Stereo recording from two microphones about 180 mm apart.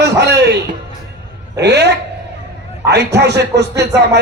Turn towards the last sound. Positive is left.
turn(degrees=-70)  # may be behind; listen again after turning